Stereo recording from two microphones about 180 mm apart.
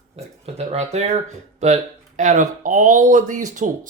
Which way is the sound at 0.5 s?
35° right (ahead or behind).